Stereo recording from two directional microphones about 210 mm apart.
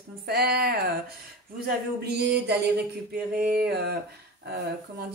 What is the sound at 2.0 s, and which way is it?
Speech, 50° right (ahead or behind).